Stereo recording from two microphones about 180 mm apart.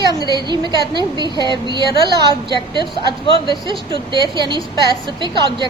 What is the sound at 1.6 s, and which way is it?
A woman's voice, 25° right (ahead or behind).